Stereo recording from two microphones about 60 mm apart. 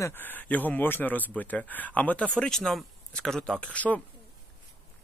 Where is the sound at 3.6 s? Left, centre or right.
Left.